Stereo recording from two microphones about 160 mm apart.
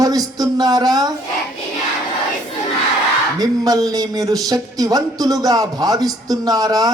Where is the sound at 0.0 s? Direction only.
20° right (ahead or behind).